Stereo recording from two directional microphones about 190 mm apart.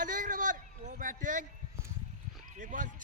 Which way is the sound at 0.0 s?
45° right (ahead or behind).